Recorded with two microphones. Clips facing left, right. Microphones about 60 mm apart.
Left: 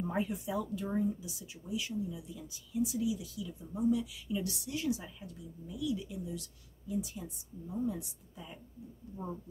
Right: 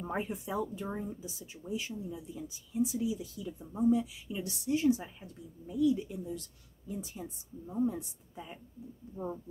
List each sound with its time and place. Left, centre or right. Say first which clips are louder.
0.0 s speech: left 1 dB; right